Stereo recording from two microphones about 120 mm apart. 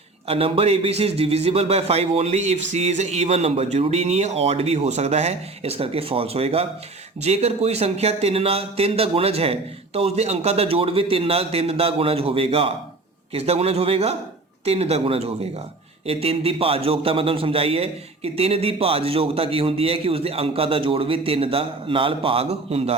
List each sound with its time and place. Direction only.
0.3 s a man's voice: 50° right (ahead or behind)